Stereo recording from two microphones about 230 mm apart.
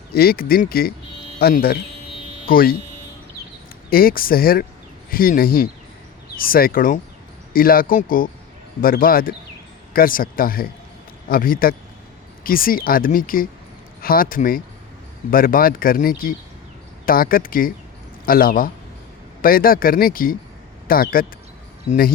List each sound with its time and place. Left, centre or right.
0.1 s speech: left
3.8 s speech: left